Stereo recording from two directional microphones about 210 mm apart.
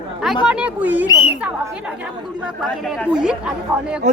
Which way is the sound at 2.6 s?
Centre (ahead or behind).